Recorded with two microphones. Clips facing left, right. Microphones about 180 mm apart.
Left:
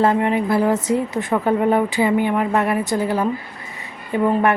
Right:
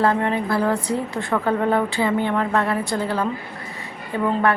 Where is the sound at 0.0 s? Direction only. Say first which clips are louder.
Left 3 dB; 15° left (ahead or behind).